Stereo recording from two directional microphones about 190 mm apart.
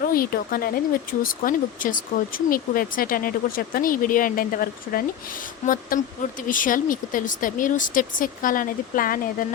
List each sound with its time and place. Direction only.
0.0 s speech: 50° left (ahead or behind)